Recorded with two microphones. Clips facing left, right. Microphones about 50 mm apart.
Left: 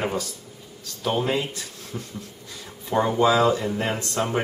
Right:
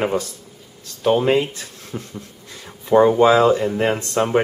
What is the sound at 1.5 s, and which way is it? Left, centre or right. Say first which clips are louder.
Speech: right 3 dB; right.